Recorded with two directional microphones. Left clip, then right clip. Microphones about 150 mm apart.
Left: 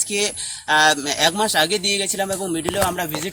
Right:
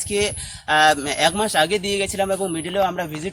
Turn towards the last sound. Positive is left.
turn(degrees=-20)  # may be behind; listen again after turning